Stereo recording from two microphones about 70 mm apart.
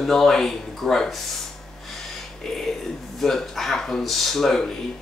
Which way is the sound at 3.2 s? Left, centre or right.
Centre.